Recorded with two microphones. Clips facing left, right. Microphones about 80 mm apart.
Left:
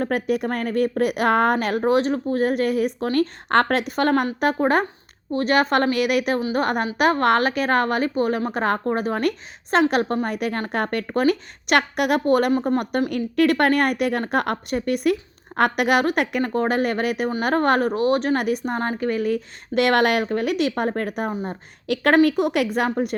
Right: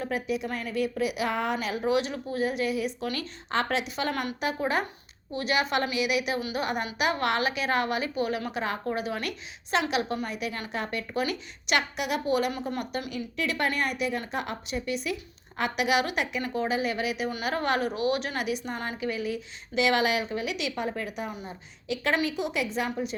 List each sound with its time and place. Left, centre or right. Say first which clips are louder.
0.0 s a woman's voice: left 7 dB; left